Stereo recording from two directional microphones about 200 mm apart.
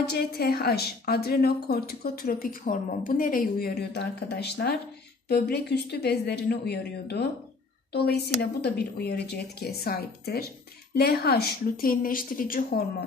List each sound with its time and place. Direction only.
0.0 s a woman's voice: 50° left (ahead or behind)